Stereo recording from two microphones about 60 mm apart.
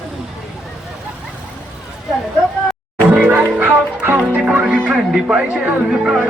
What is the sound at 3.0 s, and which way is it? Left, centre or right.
Music, right.